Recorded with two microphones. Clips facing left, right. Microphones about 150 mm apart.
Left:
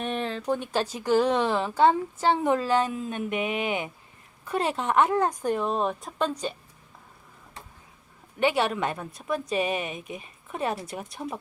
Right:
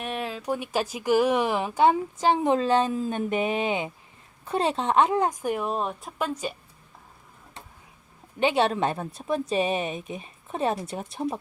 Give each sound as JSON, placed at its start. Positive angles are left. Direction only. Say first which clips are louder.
{"t": 0.0, "sound": "speech", "louder": "left 2 dB", "side_deg": -5}
{"t": 8.4, "sound": "speech", "louder": "right 2 dB", "side_deg": -20}